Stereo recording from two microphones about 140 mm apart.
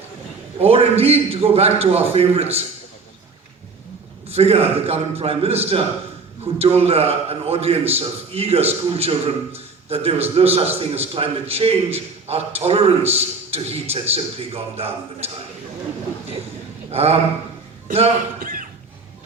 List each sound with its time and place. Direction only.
0.6 s a man's voice: 45° right (ahead or behind)
4.3 s a man's voice: 45° right (ahead or behind)
16.9 s a man's voice: 45° right (ahead or behind)
18.3 s a sound: 85° right